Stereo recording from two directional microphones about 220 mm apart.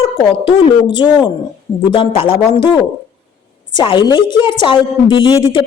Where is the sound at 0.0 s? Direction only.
25° left (ahead or behind).